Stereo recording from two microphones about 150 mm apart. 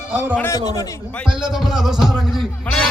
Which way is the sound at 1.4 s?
Centre (ahead or behind).